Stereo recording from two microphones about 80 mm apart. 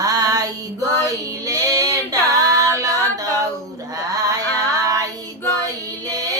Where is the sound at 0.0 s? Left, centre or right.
Right.